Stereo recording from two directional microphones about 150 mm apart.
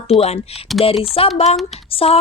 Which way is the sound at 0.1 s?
45° left (ahead or behind).